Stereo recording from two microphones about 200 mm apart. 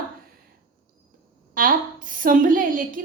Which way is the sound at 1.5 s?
45° right (ahead or behind).